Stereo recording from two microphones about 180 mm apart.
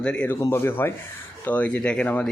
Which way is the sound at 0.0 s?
10° left (ahead or behind).